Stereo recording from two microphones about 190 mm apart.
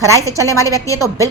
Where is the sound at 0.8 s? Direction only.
15° left (ahead or behind).